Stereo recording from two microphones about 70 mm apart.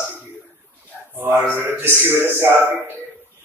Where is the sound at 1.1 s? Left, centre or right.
Right.